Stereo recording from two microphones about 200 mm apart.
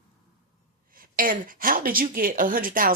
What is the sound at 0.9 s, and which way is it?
Speech, 45° right (ahead or behind).